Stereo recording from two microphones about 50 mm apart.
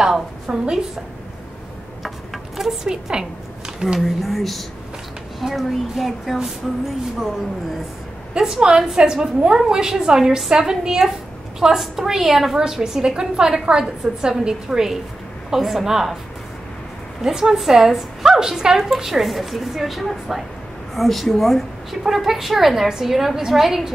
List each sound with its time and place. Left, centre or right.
0.5 s a woman's voice: centre
2.0 s a sound: centre
4.0 s a woman's voice: centre
8.4 s a woman's voice: centre
17.2 s a woman's voice: centre